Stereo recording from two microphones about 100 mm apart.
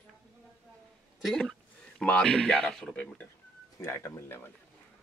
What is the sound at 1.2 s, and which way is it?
Speech, centre (ahead or behind).